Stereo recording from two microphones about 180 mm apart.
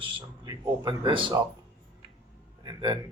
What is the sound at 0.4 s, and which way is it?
Speech, 20° right (ahead or behind).